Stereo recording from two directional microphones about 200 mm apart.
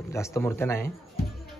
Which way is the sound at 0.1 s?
15° left (ahead or behind).